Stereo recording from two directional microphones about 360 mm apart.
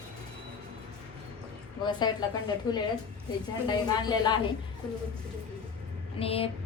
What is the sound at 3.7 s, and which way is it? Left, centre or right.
Speech, centre.